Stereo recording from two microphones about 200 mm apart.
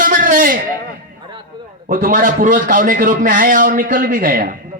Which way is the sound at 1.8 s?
40° right (ahead or behind).